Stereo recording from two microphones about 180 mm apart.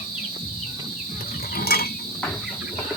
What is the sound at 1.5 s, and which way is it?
Mechanisms, 55° left (ahead or behind).